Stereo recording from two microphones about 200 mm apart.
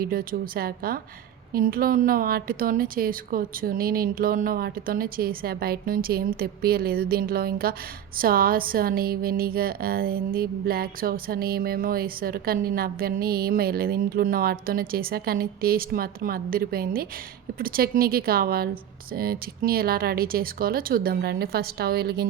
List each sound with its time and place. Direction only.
0.0 s speech: 45° right (ahead or behind)